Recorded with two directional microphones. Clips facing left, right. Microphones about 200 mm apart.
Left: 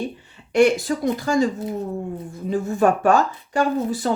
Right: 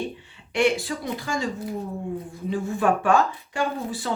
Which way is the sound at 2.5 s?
40° left (ahead or behind).